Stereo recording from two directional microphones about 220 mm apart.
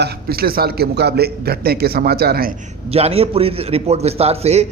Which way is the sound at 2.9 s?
25° right (ahead or behind).